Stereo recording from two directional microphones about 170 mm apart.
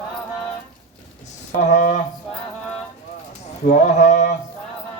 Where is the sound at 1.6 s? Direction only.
45° left (ahead or behind).